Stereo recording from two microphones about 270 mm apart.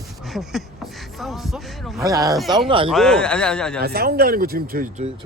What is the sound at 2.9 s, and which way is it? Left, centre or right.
Speech, centre.